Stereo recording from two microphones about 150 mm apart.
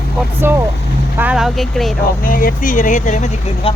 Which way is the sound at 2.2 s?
70° left (ahead or behind).